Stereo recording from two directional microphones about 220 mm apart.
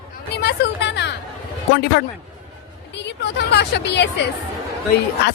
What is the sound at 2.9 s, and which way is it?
Speech, 50° left (ahead or behind).